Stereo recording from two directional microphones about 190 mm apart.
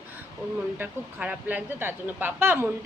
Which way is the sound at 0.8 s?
5° right (ahead or behind).